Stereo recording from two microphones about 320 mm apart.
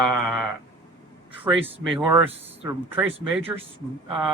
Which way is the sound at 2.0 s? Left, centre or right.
Centre.